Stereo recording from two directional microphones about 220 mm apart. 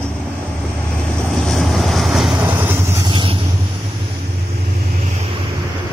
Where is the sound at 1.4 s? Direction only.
Centre (ahead or behind); by 3.3 s 20° right (ahead or behind).